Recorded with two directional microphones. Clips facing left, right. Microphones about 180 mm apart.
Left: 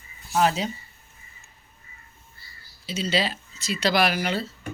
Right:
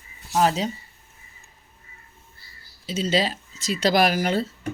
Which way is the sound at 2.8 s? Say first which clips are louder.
Right 3 dB; 45° right (ahead or behind).